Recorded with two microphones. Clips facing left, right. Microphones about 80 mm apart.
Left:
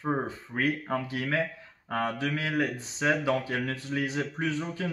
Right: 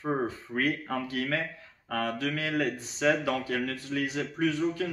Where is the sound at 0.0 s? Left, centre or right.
Left.